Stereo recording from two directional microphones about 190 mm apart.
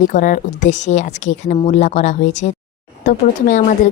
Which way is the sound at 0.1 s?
45° left (ahead or behind).